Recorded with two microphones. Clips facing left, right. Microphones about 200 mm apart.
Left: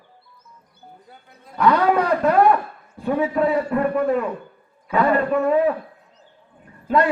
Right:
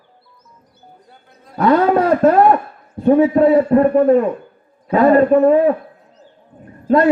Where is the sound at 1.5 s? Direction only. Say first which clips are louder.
Right 4 dB; 30° right (ahead or behind).